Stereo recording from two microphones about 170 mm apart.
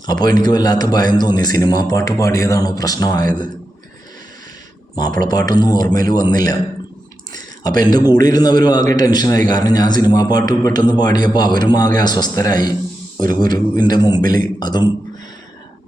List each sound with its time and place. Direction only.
0.0 s a man's voice: 25° left (ahead or behind)
5.3 s a man's voice: 25° left (ahead or behind)
7.6 s a man's voice: 25° left (ahead or behind)